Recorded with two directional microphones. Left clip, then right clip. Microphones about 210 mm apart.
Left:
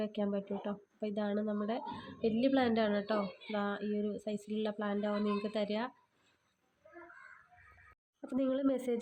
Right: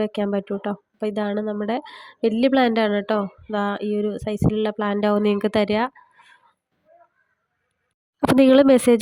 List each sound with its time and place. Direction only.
0.0 s speech: 40° right (ahead or behind)
8.4 s speech: 50° right (ahead or behind)